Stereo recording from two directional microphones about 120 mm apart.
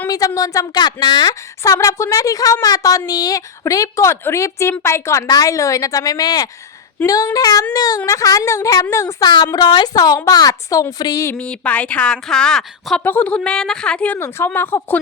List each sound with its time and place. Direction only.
0.1 s a woman's voice: 30° left (ahead or behind)
11.3 s a woman's voice: 15° left (ahead or behind)